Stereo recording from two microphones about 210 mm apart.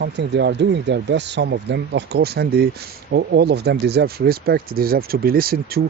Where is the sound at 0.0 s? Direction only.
55° right (ahead or behind).